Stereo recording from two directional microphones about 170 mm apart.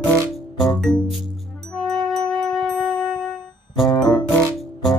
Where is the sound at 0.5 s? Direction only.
Centre (ahead or behind).